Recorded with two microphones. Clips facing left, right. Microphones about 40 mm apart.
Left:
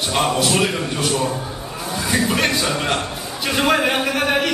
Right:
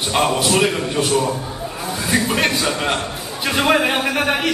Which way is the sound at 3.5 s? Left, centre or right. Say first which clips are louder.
Right 1 dB; centre.